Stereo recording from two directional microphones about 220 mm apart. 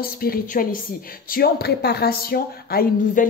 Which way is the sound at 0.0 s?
40° left (ahead or behind).